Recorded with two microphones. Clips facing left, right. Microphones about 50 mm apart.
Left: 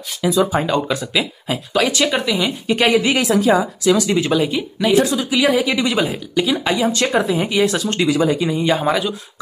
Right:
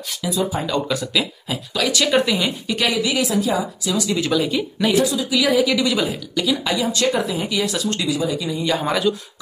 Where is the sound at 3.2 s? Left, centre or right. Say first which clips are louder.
Left 5 dB; left.